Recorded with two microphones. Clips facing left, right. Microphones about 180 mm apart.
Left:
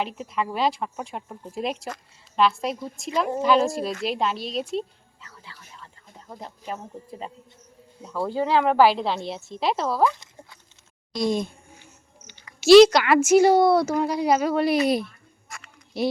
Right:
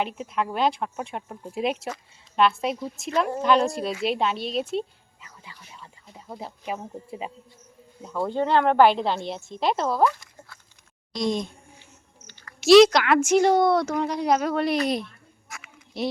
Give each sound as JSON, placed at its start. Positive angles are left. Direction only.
{"t": 0.0, "sound": "speech", "side_deg": 0}
{"t": 5.2, "sound": "music", "side_deg": -15}
{"t": 5.8, "sound": "speech", "side_deg": -10}
{"t": 8.0, "sound": "speech", "side_deg": 0}
{"t": 10.1, "sound": "a sound", "side_deg": 20}
{"t": 11.1, "sound": "speech", "side_deg": 5}
{"t": 12.3, "sound": "a sound", "side_deg": 15}
{"t": 12.5, "sound": "a woman's voice", "side_deg": 0}